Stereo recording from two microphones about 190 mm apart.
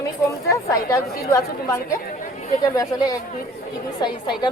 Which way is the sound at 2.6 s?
20° left (ahead or behind).